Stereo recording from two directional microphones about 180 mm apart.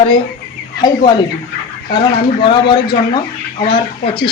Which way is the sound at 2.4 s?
25° left (ahead or behind).